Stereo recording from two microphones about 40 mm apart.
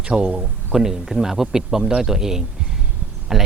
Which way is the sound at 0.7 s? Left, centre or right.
Centre.